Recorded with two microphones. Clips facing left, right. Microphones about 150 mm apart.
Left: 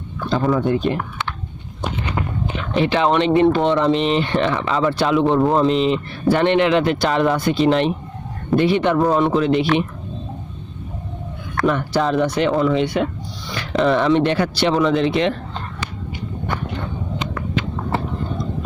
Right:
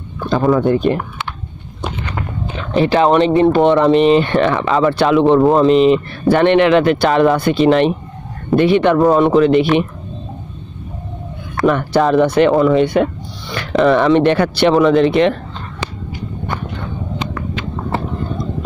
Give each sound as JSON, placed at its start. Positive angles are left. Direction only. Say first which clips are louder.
{"t": 0.3, "sound": "speech", "louder": "right 5 dB", "side_deg": -60}
{"t": 2.7, "sound": "speech", "louder": "right 5 dB", "side_deg": -40}
{"t": 3.5, "sound": "speech", "louder": "right 6 dB", "side_deg": -55}
{"t": 11.6, "sound": "speech", "louder": "right 5 dB", "side_deg": -60}